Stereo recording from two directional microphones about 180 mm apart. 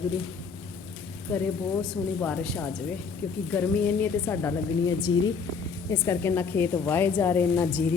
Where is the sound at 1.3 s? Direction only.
5° left (ahead or behind).